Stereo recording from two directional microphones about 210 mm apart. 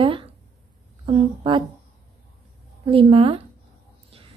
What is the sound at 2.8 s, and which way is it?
Speech, 25° right (ahead or behind).